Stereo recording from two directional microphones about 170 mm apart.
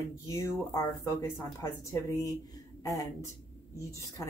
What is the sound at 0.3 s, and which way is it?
A woman's voice, 15° left (ahead or behind).